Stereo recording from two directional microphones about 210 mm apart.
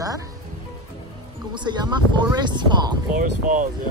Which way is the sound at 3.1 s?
40° right (ahead or behind).